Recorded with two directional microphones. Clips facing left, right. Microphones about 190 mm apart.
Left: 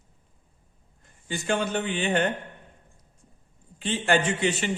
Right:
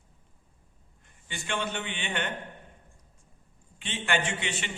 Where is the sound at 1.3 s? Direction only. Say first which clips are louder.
Left 7 dB; 40° left (ahead or behind).